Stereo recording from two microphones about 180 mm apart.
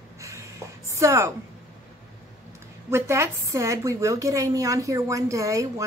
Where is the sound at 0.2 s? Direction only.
15° right (ahead or behind).